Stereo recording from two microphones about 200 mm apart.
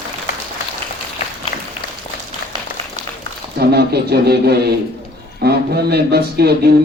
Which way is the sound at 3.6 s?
55° right (ahead or behind).